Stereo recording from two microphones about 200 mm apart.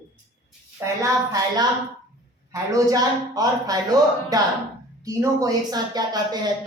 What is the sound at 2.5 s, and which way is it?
A man's voice, 15° right (ahead or behind).